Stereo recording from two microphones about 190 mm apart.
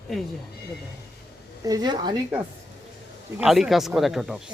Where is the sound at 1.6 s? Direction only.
20° right (ahead or behind).